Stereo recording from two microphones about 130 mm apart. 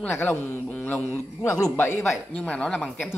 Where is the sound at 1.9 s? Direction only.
Centre (ahead or behind).